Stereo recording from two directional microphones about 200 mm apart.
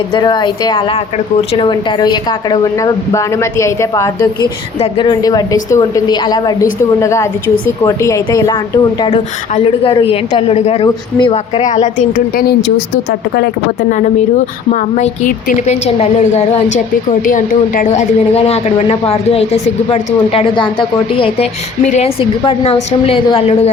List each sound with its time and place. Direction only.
0.1 s a woman's voice: 20° left (ahead or behind)
9.0 s a woman's voice: 30° left (ahead or behind); by 12.5 s 45° left (ahead or behind)
14.7 s a woman's voice: 40° left (ahead or behind)